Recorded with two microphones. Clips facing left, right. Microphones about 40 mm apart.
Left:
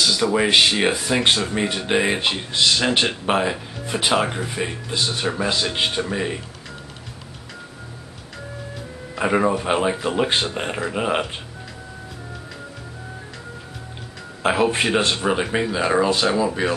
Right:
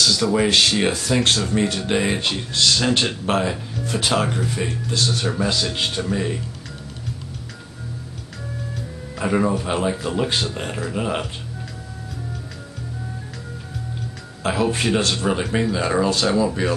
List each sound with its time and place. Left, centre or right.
0.0 s speech: centre
9.1 s speech: left
14.4 s speech: left